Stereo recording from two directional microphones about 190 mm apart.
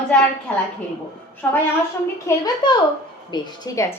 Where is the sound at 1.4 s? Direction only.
10° left (ahead or behind).